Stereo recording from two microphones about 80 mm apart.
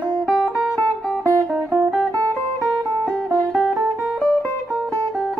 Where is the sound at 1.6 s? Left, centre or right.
Centre.